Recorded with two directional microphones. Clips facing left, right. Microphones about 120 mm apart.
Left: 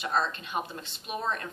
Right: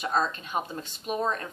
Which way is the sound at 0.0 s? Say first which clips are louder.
Right 2 dB; 40° right (ahead or behind).